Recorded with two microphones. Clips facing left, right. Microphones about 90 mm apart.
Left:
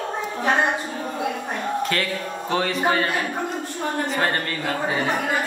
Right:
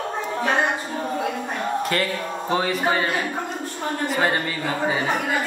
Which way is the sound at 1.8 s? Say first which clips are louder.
Right 1 dB; 5° right (ahead or behind).